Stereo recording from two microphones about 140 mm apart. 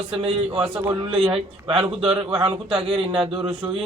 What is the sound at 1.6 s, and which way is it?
A man's voice, 40° right (ahead or behind).